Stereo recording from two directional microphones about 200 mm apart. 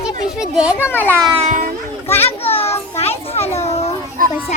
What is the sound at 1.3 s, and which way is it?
Music, 35° right (ahead or behind).